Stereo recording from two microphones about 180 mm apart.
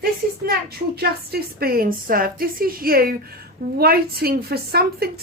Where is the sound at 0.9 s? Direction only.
60° right (ahead or behind).